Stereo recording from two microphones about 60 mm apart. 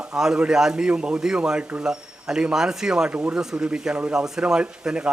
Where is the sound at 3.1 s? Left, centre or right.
Right.